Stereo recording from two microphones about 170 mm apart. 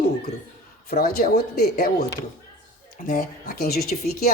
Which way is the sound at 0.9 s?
60° left (ahead or behind).